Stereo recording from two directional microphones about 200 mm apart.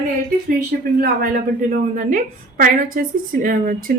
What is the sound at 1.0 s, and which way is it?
A woman's voice, 40° right (ahead or behind).